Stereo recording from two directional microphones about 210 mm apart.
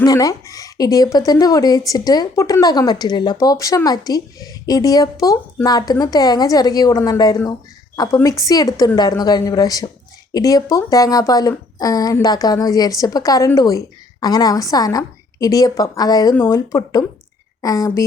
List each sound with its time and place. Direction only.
0.0 s speech: 15° left (ahead or behind)